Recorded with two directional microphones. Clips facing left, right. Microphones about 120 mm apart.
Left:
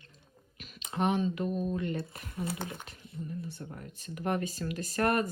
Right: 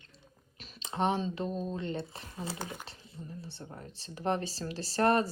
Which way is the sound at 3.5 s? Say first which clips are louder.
Left 2 dB; 30° right (ahead or behind).